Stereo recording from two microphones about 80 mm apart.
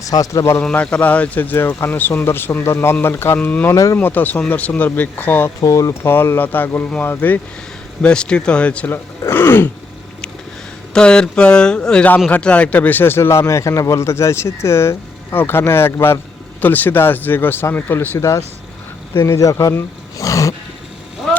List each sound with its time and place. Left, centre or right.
0.0 s a man's voice: left
0.6 s speech: centre
5.5 s a man's voice: left
5.9 s speech: left
8.0 s speech: centre
8.9 s speech: left
10.9 s speech: centre; by 18.2 s left
18.2 s speech: left
20.1 s a sound: left